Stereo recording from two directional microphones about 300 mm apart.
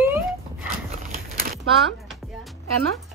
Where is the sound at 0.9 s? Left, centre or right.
Right.